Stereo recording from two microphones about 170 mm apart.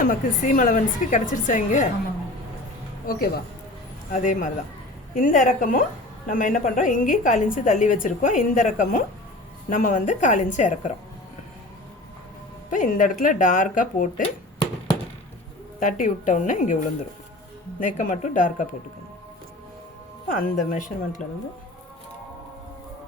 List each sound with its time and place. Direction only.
0.0 s a woman's voice: 50° left (ahead or behind)
3.1 s speech: 65° left (ahead or behind)
4.1 s a woman's voice: 50° left (ahead or behind)
12.7 s a woman's voice: 50° left (ahead or behind)
15.8 s a woman's voice: 50° left (ahead or behind)
20.3 s a woman's voice: 50° left (ahead or behind)